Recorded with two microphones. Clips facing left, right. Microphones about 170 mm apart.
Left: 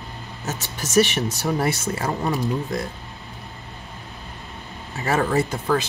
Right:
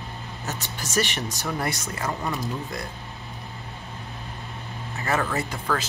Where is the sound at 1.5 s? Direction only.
30° left (ahead or behind).